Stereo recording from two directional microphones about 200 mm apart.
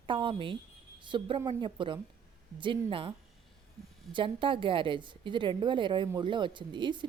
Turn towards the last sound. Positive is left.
turn(degrees=-25)  # may be behind; listen again after turning